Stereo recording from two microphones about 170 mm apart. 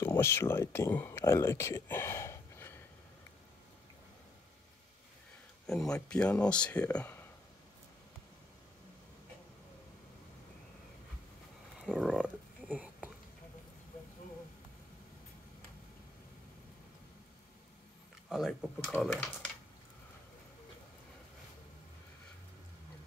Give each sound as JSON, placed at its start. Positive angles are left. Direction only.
{"t": 0.0, "sound": "speech", "side_deg": 15}
{"t": 5.7, "sound": "speech", "side_deg": 5}
{"t": 11.8, "sound": "a sound", "side_deg": -5}
{"t": 18.3, "sound": "speech", "side_deg": -5}